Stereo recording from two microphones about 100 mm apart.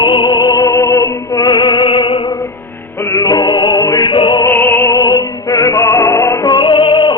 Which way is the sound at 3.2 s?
45° left (ahead or behind).